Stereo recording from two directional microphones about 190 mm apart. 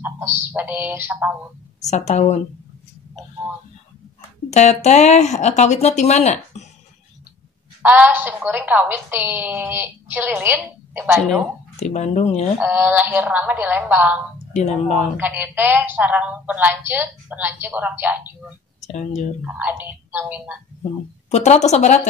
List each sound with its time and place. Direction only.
0.0 s music: 10° right (ahead or behind)
1.9 s speech: 35° left (ahead or behind)
4.5 s speech: 35° left (ahead or behind)
7.8 s a woman's voice: 10° right (ahead or behind)
11.7 s speech: 35° left (ahead or behind)
12.5 s a woman's voice: 10° right (ahead or behind)
14.5 s speech: 40° left (ahead or behind)
15.1 s a woman's voice: 10° right (ahead or behind)
18.9 s speech: 40° left (ahead or behind)
19.4 s a woman's voice: 10° right (ahead or behind)
21.3 s speech: 35° left (ahead or behind)